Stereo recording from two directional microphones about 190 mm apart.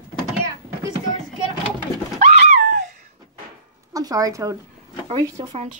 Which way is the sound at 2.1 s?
40° right (ahead or behind).